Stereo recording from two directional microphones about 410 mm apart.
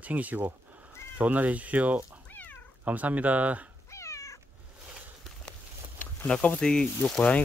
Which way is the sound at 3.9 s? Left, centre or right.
Centre.